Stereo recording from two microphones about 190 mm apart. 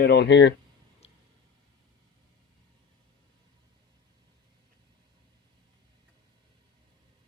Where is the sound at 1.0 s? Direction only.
30° left (ahead or behind).